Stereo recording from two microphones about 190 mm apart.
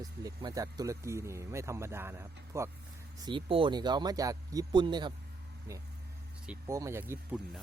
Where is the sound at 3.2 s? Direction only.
25° right (ahead or behind).